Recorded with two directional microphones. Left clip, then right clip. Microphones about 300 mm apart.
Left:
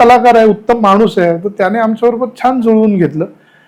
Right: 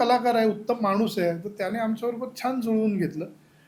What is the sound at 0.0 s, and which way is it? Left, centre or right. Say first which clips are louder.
Speech: left 16 dB; left.